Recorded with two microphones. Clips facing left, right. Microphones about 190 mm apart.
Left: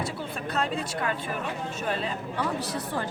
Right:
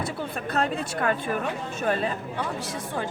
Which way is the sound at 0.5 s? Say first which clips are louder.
Right 3 dB; 55° right (ahead or behind).